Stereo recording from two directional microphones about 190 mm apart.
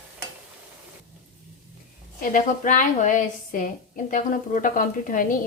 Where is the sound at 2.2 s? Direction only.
45° left (ahead or behind).